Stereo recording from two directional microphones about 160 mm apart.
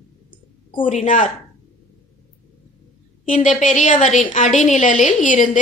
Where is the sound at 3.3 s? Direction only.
50° left (ahead or behind).